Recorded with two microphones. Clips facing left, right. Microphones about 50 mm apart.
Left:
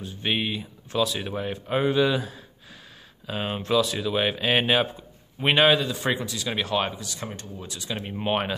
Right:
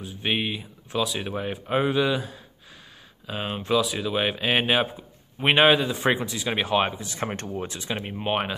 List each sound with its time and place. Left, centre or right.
0.0 s speech: centre; by 7.2 s right
7.2 s speech: right
8.0 s speech: centre
8.3 s speech: centre